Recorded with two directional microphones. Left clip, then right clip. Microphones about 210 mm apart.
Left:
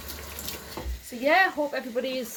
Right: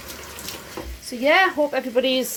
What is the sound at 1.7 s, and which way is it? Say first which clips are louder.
Stir: right 9 dB; 40° right (ahead or behind).